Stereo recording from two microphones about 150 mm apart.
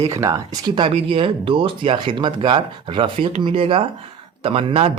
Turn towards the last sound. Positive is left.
turn(degrees=-40)  # may be behind; listen again after turning